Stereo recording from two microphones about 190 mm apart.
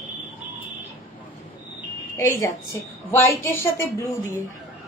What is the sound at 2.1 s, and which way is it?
A woman's voice, 15° left (ahead or behind).